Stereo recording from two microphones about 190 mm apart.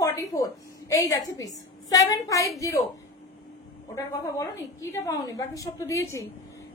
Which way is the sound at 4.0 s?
15° left (ahead or behind).